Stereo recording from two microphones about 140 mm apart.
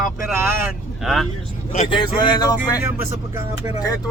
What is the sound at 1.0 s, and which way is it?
Speech, centre (ahead or behind).